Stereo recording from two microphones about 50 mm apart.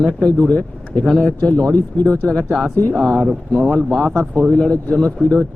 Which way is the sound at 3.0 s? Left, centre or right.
Centre.